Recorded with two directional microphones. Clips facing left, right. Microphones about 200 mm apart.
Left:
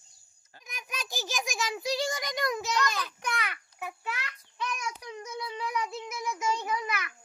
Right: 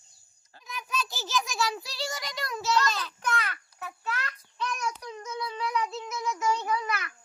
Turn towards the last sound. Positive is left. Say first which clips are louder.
# right 2 dB
turn(degrees=20)  # may be behind; listen again after turning